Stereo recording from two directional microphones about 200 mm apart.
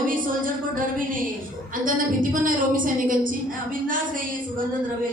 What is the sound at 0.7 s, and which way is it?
Music, 40° right (ahead or behind).